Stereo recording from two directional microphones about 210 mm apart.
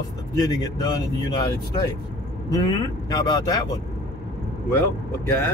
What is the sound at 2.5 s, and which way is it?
Speech, 15° left (ahead or behind).